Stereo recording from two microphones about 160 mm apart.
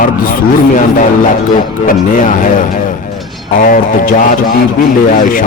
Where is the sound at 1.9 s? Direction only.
55° left (ahead or behind).